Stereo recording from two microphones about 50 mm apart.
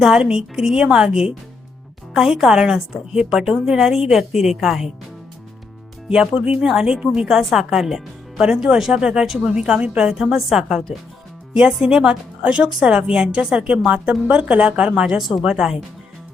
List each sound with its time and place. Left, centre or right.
0.2 s a woman's voice: centre
6.1 s a woman's voice: centre
9.6 s a woman's voice: centre
12.4 s a woman's voice: right
15.2 s a woman's voice: centre
15.4 s a woman's voice: centre